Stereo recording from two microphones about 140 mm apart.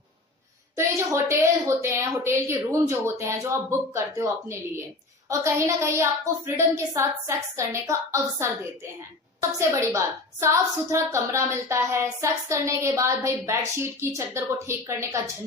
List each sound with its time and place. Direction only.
0.8 s a woman's voice: 20° right (ahead or behind)